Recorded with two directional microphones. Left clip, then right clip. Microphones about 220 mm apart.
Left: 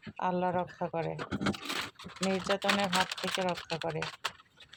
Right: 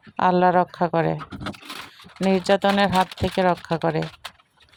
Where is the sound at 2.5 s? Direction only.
40° right (ahead or behind).